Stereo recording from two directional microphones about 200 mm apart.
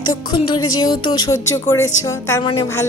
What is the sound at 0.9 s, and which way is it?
Speech, 20° left (ahead or behind).